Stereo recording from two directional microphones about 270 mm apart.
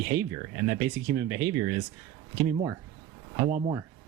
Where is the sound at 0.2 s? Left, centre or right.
Centre.